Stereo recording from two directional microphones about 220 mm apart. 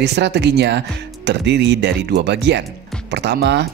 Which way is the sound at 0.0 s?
50° right (ahead or behind).